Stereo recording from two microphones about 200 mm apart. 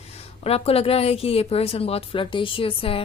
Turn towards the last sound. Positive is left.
turn(degrees=25)  # may be behind; listen again after turning